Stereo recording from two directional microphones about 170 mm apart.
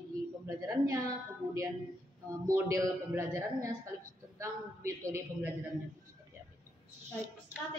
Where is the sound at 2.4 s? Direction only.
20° right (ahead or behind).